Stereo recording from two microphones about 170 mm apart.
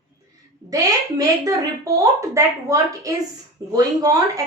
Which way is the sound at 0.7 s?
20° right (ahead or behind).